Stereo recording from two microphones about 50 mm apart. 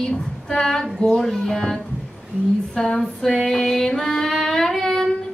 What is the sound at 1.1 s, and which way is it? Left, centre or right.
Music, centre.